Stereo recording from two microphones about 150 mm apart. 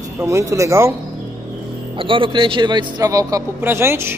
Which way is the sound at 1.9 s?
35° right (ahead or behind).